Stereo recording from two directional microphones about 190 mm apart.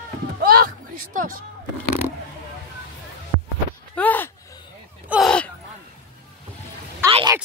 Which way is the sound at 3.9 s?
10° left (ahead or behind).